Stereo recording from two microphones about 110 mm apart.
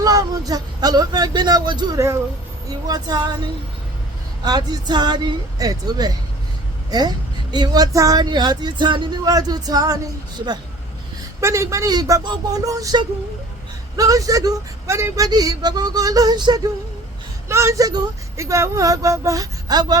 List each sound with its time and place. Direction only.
0.0 s speech: 35° right (ahead or behind)
4.4 s speech: 40° right (ahead or behind)
11.3 s speech: 25° right (ahead or behind)
17.5 s speech: 25° right (ahead or behind)